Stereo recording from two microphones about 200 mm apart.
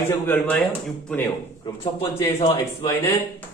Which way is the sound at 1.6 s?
25° left (ahead or behind).